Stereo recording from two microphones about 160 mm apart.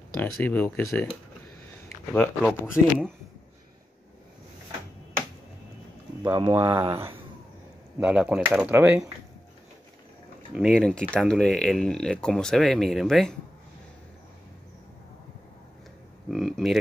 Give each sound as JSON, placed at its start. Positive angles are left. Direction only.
{"t": 0.2, "sound": "speech", "side_deg": 10}
{"t": 2.1, "sound": "speech", "side_deg": 5}
{"t": 6.2, "sound": "speech", "side_deg": -20}
{"t": 10.5, "sound": "speech", "side_deg": 0}
{"t": 16.3, "sound": "speech", "side_deg": 0}